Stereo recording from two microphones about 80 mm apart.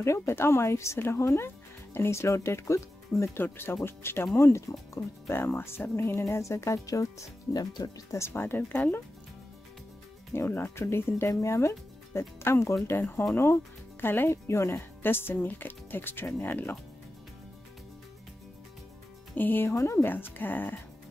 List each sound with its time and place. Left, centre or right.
0.0 s speech: left
8.3 s speech: left
10.3 s speech: left
19.3 s speech: left
20.1 s speech: left